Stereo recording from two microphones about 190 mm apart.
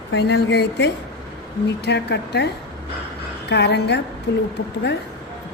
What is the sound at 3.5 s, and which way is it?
Speech, 65° left (ahead or behind).